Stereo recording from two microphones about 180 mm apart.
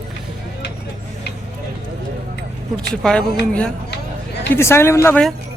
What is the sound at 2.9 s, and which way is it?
Speech, 5° left (ahead or behind).